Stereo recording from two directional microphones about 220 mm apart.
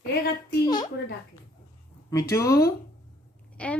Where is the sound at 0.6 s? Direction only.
20° left (ahead or behind).